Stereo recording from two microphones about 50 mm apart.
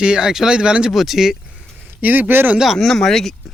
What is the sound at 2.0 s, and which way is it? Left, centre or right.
Speech, right.